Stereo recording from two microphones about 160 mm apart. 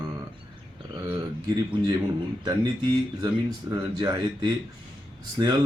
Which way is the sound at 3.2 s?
25° right (ahead or behind).